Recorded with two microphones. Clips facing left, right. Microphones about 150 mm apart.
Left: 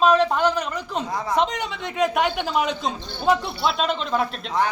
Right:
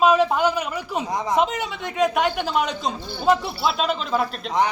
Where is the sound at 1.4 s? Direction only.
5° right (ahead or behind).